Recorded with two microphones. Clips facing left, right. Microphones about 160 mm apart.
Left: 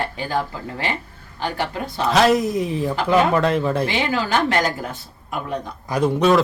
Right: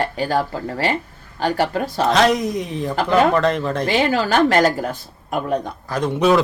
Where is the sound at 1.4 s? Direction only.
40° right (ahead or behind).